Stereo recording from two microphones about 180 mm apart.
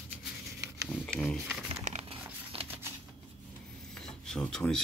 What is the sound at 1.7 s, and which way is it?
Crumpling, 35° right (ahead or behind).